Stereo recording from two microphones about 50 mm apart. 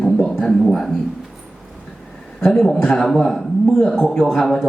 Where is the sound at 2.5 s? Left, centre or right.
Centre.